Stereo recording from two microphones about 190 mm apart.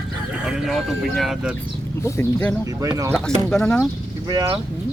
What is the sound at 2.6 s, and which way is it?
Speech, 15° right (ahead or behind).